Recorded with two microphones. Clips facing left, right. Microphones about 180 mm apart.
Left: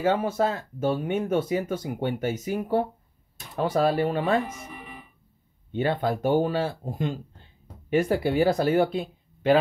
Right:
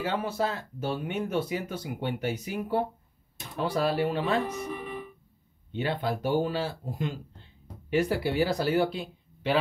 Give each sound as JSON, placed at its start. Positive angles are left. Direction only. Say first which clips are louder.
{"t": 0.0, "sound": "speech", "louder": "left 6 dB", "side_deg": 50}
{"t": 5.7, "sound": "speech", "louder": "left 4 dB", "side_deg": 50}